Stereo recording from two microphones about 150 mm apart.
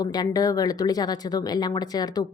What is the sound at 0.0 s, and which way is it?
Speech, 25° left (ahead or behind).